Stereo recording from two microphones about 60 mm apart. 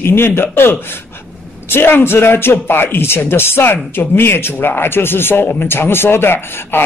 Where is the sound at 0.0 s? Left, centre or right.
Left.